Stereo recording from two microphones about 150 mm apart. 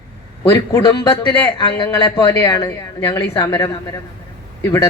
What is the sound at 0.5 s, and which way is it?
A man's voice, 25° left (ahead or behind).